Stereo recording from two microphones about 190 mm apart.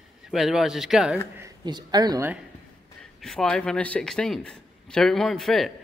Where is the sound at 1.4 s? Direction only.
20° right (ahead or behind).